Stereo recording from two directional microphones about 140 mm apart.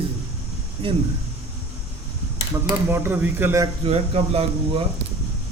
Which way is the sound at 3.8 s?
45° right (ahead or behind).